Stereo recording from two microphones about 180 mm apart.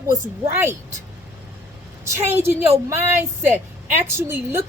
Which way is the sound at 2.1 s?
15° right (ahead or behind).